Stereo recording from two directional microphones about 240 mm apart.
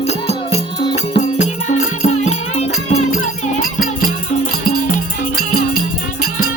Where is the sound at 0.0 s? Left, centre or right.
Left.